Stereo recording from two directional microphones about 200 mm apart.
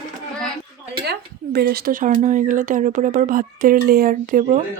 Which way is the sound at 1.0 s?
55° right (ahead or behind).